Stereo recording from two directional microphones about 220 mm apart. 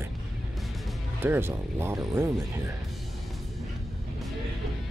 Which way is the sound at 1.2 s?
10° right (ahead or behind).